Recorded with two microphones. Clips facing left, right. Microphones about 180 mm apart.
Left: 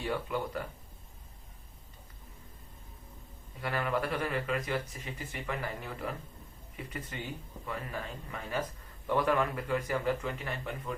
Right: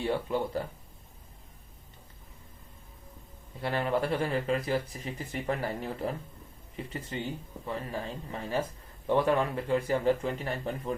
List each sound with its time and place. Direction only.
0.0 s speech: 30° right (ahead or behind)
3.6 s speech: 30° right (ahead or behind)
7.6 s speech: 30° right (ahead or behind)